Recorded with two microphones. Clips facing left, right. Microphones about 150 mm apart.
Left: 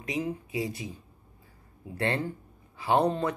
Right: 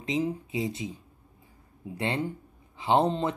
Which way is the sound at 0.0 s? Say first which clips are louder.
Right 3 dB; 25° right (ahead or behind).